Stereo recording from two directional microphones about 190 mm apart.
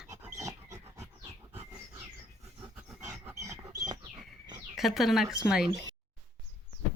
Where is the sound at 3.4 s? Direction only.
15° right (ahead or behind).